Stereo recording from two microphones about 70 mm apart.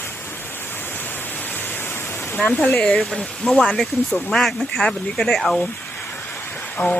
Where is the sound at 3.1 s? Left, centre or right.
Centre.